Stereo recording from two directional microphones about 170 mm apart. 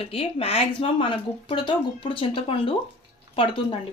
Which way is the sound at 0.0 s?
35° left (ahead or behind).